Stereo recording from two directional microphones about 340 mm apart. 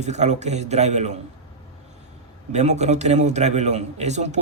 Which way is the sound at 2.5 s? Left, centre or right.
Centre.